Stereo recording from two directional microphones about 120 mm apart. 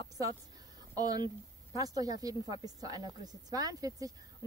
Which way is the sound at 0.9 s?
35° right (ahead or behind).